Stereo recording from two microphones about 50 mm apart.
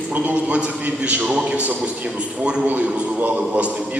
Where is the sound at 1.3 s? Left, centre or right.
Right.